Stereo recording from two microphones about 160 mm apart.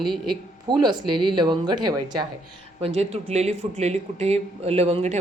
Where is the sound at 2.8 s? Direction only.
40° right (ahead or behind).